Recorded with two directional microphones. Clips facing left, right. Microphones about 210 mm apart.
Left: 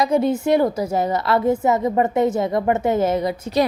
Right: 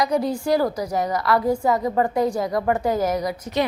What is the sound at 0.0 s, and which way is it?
A woman's voice, 25° left (ahead or behind).